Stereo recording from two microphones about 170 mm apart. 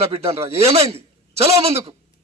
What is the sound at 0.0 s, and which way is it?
A man's voice, 35° right (ahead or behind).